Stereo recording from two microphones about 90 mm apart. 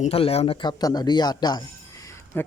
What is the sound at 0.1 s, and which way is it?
Speech, 90° left.